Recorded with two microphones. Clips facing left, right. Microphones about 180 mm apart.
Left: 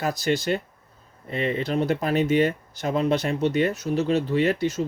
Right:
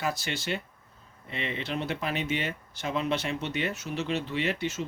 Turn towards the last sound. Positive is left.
turn(degrees=40)  # may be behind; listen again after turning